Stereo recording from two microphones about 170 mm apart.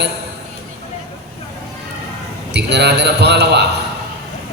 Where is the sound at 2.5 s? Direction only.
85° right.